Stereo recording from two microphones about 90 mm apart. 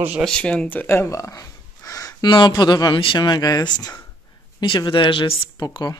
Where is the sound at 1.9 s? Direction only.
40° left (ahead or behind).